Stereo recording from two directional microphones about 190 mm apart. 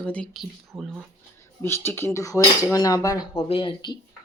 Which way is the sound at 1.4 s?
15° left (ahead or behind).